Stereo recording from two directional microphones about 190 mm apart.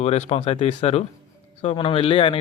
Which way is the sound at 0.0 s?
35° left (ahead or behind).